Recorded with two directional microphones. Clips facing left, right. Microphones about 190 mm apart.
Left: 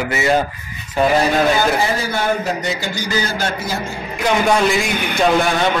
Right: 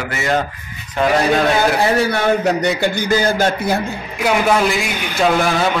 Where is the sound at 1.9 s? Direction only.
65° right (ahead or behind).